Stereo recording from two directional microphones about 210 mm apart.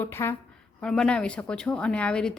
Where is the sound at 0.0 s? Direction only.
10° left (ahead or behind).